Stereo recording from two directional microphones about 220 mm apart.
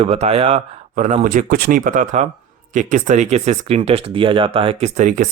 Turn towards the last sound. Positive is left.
turn(degrees=-35)  # may be behind; listen again after turning